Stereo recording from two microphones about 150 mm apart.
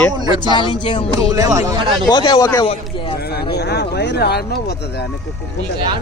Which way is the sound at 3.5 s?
90° left.